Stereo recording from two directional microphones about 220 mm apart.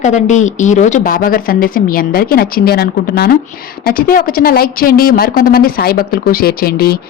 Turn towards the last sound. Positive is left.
turn(degrees=45)  # may be behind; listen again after turning